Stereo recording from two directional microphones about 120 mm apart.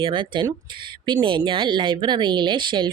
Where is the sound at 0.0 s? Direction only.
40° right (ahead or behind).